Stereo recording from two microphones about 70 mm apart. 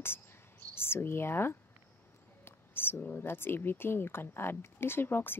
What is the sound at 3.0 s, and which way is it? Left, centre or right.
Speech, left.